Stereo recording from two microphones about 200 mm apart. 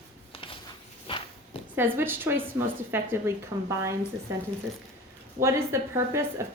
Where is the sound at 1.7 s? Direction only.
10° right (ahead or behind).